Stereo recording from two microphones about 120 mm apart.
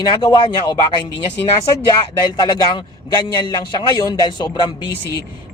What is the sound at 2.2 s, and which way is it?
Speech, 35° left (ahead or behind).